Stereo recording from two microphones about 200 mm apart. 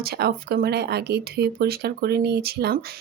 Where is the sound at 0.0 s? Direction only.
50° right (ahead or behind).